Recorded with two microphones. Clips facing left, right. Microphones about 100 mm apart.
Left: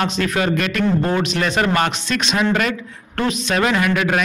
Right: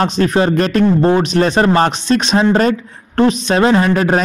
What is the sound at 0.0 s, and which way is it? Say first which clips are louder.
Speech: right 6 dB; 30° right (ahead or behind).